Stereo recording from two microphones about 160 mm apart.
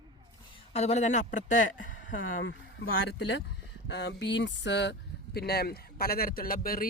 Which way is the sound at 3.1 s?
90° left.